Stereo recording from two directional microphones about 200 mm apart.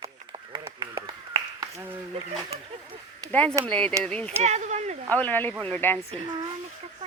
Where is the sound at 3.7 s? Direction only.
5° left (ahead or behind).